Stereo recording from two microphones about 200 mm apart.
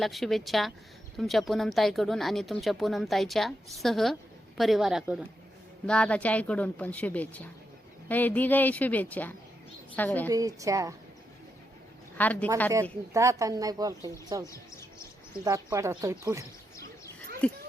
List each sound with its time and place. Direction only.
0.0 s a woman's voice: centre (ahead or behind)
10.2 s a woman's voice: 15° right (ahead or behind)
12.1 s speech: 10° left (ahead or behind)
13.1 s a woman's voice: 15° right (ahead or behind)
14.5 s bird: 15° left (ahead or behind)
15.4 s a woman's voice: 15° right (ahead or behind)
17.4 s speech: 5° left (ahead or behind)